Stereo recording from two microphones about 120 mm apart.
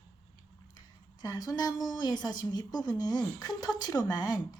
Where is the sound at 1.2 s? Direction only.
30° left (ahead or behind).